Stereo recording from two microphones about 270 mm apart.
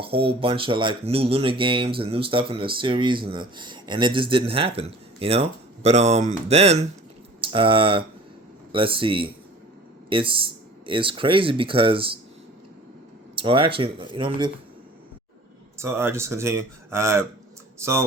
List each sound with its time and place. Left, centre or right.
0.0 s speech: right
13.3 s speech: centre
15.8 s speech: centre